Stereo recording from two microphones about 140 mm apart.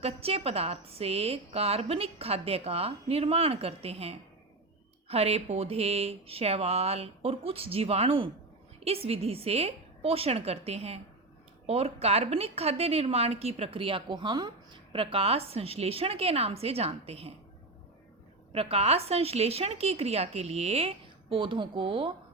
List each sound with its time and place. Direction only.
0.0 s a woman's voice: 45° right (ahead or behind)
18.5 s a woman's voice: 45° right (ahead or behind)